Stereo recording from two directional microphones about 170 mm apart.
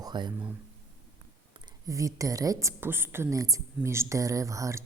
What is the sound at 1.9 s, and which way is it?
Speech, 20° right (ahead or behind).